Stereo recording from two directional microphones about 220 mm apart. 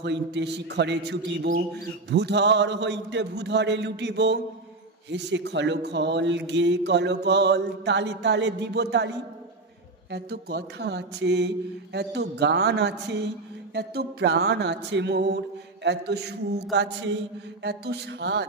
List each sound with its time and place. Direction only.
0.0 s speech: 50° right (ahead or behind)
10.1 s speech: 50° right (ahead or behind)
17.6 s speech: 50° right (ahead or behind)